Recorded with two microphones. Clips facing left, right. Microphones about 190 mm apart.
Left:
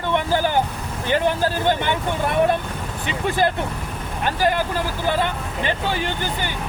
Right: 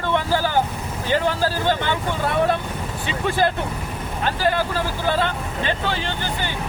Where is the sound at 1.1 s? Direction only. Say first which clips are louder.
Left 1 dB; 20° left (ahead or behind).